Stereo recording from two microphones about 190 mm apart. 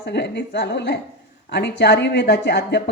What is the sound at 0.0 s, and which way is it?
Speech, 65° left (ahead or behind).